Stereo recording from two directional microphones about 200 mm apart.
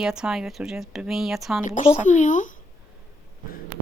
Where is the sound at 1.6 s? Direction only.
40° left (ahead or behind).